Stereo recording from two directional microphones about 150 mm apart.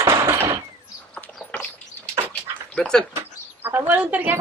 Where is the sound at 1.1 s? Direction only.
5° left (ahead or behind).